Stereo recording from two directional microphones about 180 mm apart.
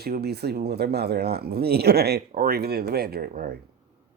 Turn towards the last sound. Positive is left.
turn(degrees=-55)  # may be behind; listen again after turning